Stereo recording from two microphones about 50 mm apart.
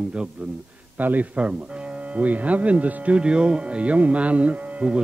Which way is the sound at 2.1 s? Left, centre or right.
Right.